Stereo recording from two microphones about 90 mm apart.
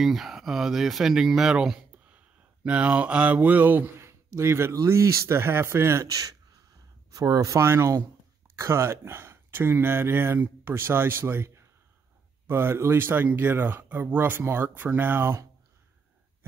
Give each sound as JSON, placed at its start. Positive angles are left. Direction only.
{"t": 0.0, "sound": "speech", "side_deg": -5}
{"t": 4.1, "sound": "a sound", "side_deg": -30}
{"t": 4.8, "sound": "speech", "side_deg": -30}